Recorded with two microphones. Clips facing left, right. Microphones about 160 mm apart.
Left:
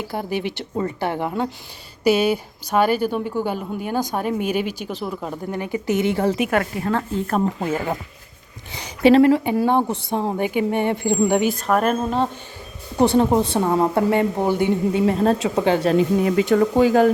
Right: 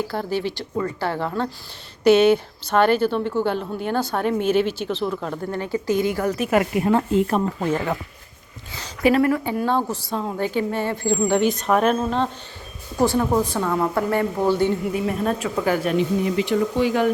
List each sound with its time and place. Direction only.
0.1 s a woman's voice: 15° left (ahead or behind)
6.5 s speech: 15° right (ahead or behind)
7.3 s a woman's voice: 10° left (ahead or behind)
8.7 s a woman's voice: 20° left (ahead or behind); by 12.3 s 5° left (ahead or behind)
13.1 s a woman's voice: 25° left (ahead or behind)
14.9 s a woman's voice: 30° left (ahead or behind)
16.2 s speech: 55° left (ahead or behind)